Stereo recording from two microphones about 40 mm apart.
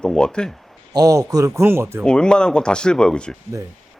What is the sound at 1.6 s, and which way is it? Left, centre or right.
Speech, right.